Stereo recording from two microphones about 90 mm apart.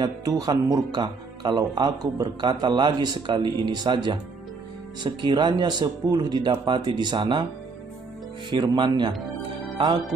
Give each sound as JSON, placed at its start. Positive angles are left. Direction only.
{"t": 0.0, "sound": "speech", "side_deg": -45}
{"t": 0.9, "sound": "speech", "side_deg": -55}
{"t": 1.6, "sound": "a man's voice", "side_deg": -45}
{"t": 8.5, "sound": "speech", "side_deg": -60}
{"t": 9.8, "sound": "music", "side_deg": -60}